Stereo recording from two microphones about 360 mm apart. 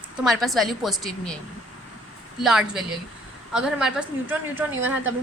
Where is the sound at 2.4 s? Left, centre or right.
Centre.